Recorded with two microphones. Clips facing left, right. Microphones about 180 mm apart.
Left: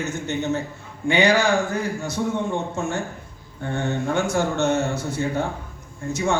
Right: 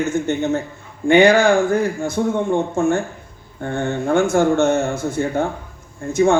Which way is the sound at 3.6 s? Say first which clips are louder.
Right 3 dB; 50° right (ahead or behind).